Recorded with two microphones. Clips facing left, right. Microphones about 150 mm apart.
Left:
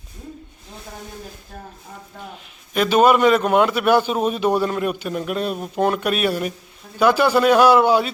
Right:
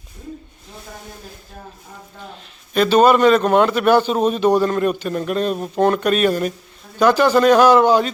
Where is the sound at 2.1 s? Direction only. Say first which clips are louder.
Even; 10° left (ahead or behind).